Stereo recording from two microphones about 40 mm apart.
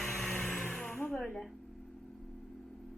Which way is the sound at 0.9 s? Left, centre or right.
Left.